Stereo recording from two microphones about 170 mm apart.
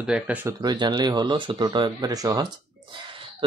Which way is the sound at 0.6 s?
25° right (ahead or behind).